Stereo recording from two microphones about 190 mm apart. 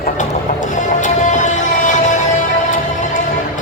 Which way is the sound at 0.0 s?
40° left (ahead or behind).